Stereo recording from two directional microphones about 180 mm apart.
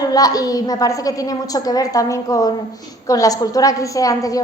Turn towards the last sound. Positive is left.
turn(degrees=20)  # may be behind; listen again after turning